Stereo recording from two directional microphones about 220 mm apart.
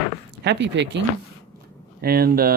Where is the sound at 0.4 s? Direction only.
55° right (ahead or behind).